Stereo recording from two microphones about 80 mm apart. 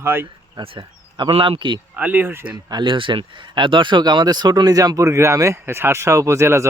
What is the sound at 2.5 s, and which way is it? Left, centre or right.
Speech, right.